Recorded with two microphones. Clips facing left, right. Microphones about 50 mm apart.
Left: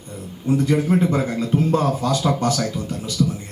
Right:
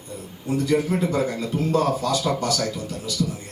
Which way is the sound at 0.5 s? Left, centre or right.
Left.